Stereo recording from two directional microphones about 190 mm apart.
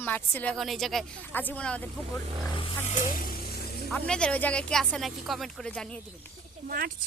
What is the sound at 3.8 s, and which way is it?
Speech, 5° left (ahead or behind).